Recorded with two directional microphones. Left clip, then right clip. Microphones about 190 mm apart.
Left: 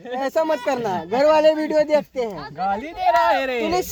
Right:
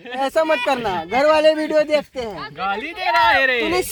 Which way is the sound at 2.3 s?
45° left (ahead or behind).